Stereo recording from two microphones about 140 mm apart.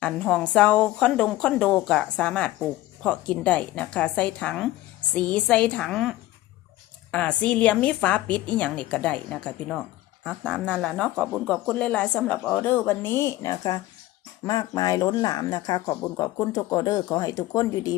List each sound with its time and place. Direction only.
0.0 s a woman's voice: 5° left (ahead or behind); by 17.9 s 25° left (ahead or behind)